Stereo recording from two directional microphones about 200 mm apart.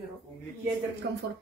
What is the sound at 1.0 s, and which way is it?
Speech, 55° right (ahead or behind).